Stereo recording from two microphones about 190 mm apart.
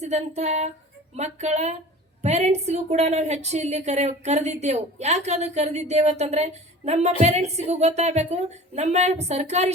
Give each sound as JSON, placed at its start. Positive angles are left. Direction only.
{"t": 0.0, "sound": "a woman's voice", "side_deg": -35}